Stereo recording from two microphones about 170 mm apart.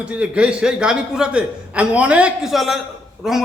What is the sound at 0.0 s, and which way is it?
A man's voice, 5° right (ahead or behind).